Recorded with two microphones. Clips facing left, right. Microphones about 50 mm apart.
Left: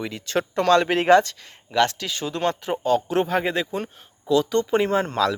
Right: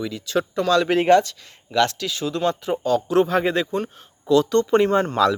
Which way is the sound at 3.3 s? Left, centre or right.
Centre.